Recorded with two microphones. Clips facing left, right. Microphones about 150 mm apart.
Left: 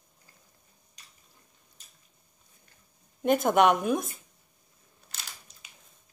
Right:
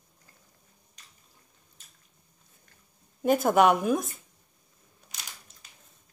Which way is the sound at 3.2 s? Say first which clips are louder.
Right 1 dB; centre (ahead or behind).